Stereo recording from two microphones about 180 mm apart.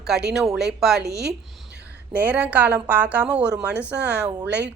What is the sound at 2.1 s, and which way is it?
Speech, 10° right (ahead or behind).